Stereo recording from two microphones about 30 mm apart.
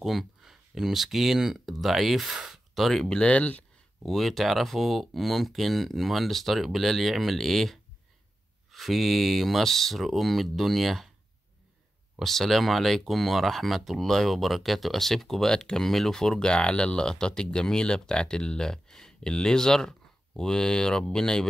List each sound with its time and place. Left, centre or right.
0.0 s speech: centre
0.5 s a sound: centre
0.9 s speech: centre
1.8 s speech: centre
2.7 s speech: centre
3.3 s speech: left
4.0 s speech: centre
12.2 s speech: centre
15.4 s speech: left
15.9 s speech: centre
16.2 s speech: left